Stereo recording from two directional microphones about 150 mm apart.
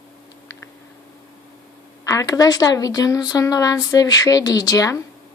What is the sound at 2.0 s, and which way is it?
Speech, 20° left (ahead or behind).